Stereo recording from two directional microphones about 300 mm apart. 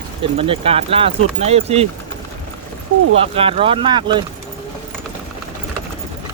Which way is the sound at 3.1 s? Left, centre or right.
Centre.